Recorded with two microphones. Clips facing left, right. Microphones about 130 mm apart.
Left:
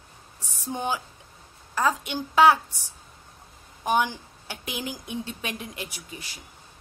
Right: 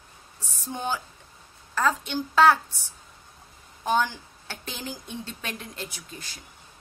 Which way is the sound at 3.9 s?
15° left (ahead or behind).